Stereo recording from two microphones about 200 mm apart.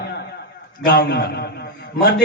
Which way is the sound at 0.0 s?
55° left (ahead or behind).